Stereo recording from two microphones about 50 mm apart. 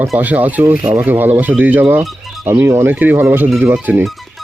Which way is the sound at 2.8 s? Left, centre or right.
Right.